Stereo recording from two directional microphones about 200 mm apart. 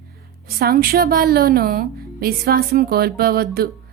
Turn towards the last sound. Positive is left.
turn(degrees=-50)  # may be behind; listen again after turning